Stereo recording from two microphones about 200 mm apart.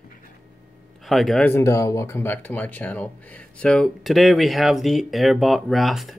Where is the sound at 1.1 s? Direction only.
Centre (ahead or behind).